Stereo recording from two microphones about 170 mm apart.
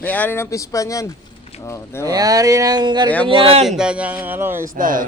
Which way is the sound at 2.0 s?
20° right (ahead or behind).